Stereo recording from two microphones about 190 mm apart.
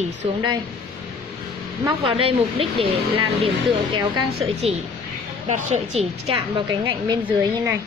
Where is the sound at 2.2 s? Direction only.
30° right (ahead or behind).